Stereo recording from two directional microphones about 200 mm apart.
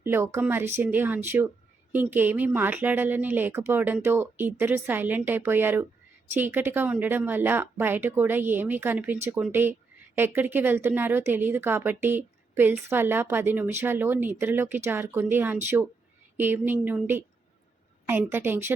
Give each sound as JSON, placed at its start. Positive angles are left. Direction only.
{"t": 0.0, "sound": "a woman's voice", "side_deg": -10}